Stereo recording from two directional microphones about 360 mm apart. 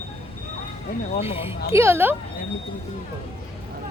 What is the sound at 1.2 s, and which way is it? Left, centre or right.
Speech, centre.